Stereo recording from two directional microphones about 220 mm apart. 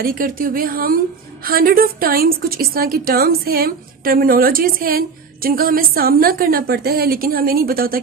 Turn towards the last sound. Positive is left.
turn(degrees=-40)  # may be behind; listen again after turning